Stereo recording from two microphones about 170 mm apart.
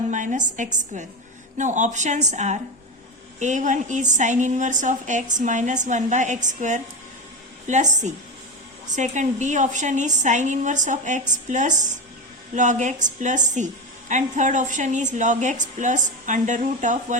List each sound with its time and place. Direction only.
0.1 s a woman's voice: 45° right (ahead or behind)